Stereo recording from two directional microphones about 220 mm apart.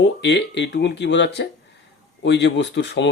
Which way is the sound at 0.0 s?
50° left (ahead or behind).